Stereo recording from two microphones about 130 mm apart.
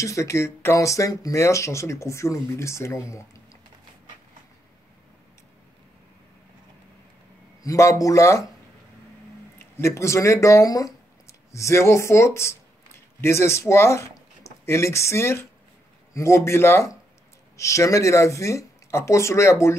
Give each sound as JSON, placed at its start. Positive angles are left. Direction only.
{"t": 0.0, "sound": "speech", "side_deg": 25}
{"t": 7.6, "sound": "speech", "side_deg": 25}
{"t": 9.6, "sound": "speech", "side_deg": 20}